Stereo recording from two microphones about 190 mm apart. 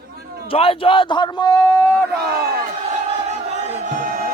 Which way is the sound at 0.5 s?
30° left (ahead or behind).